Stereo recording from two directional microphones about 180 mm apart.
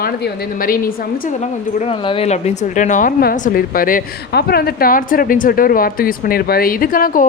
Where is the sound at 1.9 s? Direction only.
30° left (ahead or behind).